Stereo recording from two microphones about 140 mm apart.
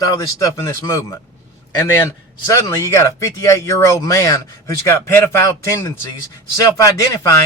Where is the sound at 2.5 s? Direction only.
20° left (ahead or behind).